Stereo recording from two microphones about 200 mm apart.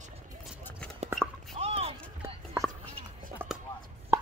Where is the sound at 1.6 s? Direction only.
30° right (ahead or behind).